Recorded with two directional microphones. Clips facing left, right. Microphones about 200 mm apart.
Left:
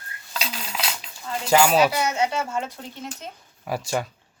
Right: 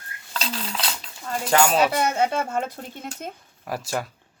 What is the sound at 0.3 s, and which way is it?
Cutlery, 5° left (ahead or behind).